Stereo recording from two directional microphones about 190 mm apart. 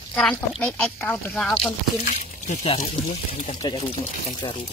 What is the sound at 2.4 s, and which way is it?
Speech, 35° left (ahead or behind).